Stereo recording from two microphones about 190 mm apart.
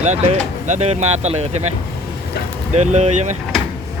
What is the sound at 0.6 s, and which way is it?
Speech, 35° right (ahead or behind).